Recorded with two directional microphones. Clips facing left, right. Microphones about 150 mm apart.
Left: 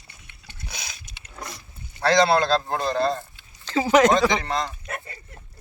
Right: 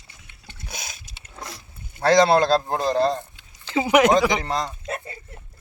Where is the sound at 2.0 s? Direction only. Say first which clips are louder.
Right 3 dB; 45° right (ahead or behind).